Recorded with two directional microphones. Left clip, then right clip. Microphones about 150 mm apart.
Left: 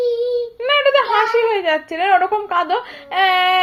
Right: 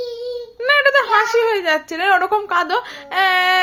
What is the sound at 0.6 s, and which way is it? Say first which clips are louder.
A woman's voice: right 1 dB; 20° right (ahead or behind).